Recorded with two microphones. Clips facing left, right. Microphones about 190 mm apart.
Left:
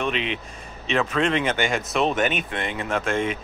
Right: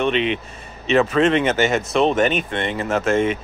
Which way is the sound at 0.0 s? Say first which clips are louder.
Right 6 dB; centre (ahead or behind).